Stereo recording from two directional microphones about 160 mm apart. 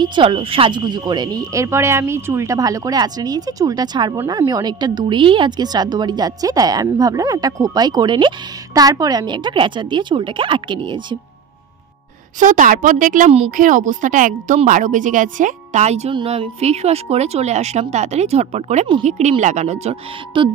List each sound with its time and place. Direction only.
0.0 s a woman's voice: 30° right (ahead or behind)
12.4 s a woman's voice: 55° right (ahead or behind)